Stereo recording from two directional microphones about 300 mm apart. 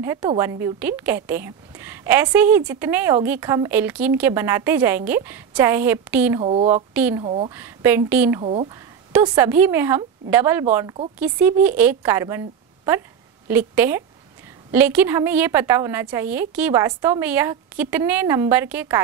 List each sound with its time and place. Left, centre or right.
0.0 s a woman's voice: centre
6.4 s speech: centre
6.7 s a woman's voice: centre
7.2 s speech: centre
7.5 s a woman's voice: centre
8.4 s speech: centre
9.1 s a woman's voice: centre